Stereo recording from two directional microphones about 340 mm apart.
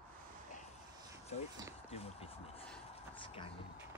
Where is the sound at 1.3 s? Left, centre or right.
Centre.